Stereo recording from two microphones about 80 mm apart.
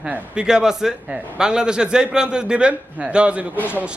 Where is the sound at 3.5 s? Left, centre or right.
Left.